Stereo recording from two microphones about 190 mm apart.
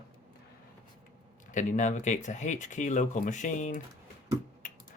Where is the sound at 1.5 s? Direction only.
40° left (ahead or behind).